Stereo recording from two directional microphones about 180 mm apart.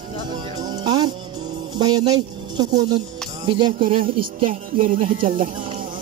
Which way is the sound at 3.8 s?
50° right (ahead or behind).